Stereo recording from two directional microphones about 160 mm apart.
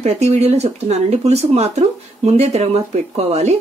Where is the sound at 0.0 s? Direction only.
45° right (ahead or behind).